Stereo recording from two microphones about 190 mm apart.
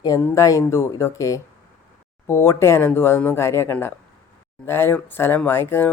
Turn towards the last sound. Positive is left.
turn(degrees=10)  # may be behind; listen again after turning